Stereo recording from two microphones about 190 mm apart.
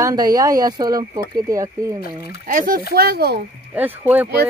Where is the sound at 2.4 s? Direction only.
45° right (ahead or behind).